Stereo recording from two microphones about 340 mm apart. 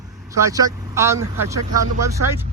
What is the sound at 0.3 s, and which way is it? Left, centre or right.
Speech, centre.